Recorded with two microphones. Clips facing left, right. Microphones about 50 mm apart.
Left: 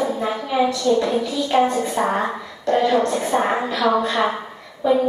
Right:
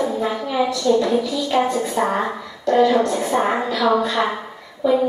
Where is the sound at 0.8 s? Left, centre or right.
Centre.